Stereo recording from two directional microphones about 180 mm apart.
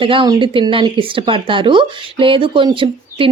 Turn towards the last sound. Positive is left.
turn(degrees=-30)  # may be behind; listen again after turning